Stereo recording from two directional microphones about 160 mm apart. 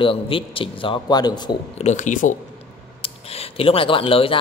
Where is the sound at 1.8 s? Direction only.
45° left (ahead or behind).